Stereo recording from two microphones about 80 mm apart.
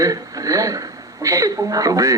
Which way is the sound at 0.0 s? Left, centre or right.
Right.